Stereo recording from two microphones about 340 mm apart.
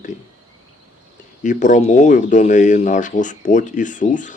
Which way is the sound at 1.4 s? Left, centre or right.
Left.